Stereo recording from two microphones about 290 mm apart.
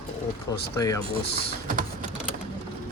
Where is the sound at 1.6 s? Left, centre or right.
Right.